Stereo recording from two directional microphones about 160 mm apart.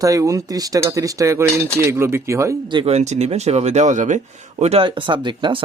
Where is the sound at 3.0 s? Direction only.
45° right (ahead or behind).